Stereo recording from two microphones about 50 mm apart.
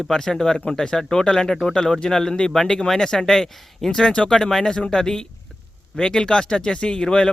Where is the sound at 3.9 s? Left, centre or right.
Centre.